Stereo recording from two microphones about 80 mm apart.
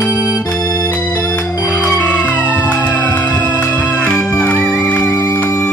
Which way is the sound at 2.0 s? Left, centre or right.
Centre.